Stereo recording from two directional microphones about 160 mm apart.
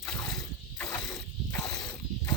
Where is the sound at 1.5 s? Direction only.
20° left (ahead or behind).